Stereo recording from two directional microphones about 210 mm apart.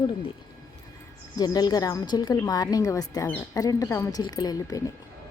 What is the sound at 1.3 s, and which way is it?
A woman's voice, 20° left (ahead or behind).